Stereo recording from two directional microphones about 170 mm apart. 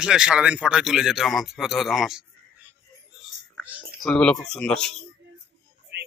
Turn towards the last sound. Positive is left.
turn(degrees=-80)